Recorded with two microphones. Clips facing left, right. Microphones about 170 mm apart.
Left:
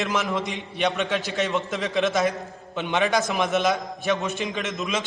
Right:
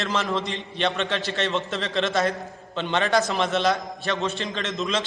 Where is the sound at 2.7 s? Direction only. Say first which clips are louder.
Even; 15° left (ahead or behind).